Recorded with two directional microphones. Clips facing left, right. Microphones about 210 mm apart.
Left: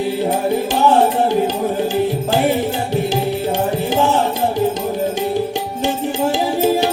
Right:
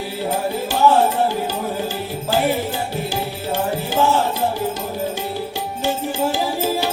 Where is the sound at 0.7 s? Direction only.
20° left (ahead or behind).